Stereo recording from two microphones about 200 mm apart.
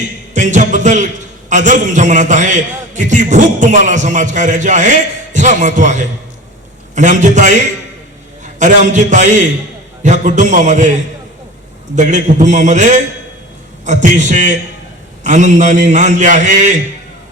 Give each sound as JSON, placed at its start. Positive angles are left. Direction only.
{"t": 0.3, "sound": "a man's voice", "side_deg": -40}
{"t": 11.9, "sound": "a man's voice", "side_deg": -40}